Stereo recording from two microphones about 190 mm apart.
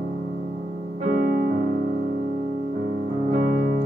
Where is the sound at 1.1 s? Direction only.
55° right (ahead or behind).